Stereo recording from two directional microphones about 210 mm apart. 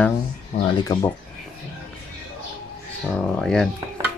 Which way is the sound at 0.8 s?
20° left (ahead or behind).